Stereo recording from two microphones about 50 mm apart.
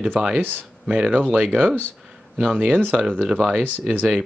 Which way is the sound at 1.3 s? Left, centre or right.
Right.